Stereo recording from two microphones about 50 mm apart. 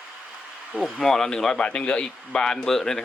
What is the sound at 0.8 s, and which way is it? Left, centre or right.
Speech, centre.